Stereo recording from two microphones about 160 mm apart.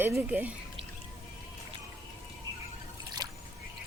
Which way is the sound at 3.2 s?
25° right (ahead or behind).